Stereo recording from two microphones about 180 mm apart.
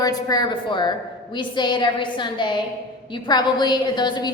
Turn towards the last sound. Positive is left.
turn(degrees=25)  # may be behind; listen again after turning